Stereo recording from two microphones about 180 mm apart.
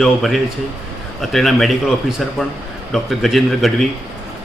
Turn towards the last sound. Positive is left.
turn(degrees=0)  # may be behind; listen again after turning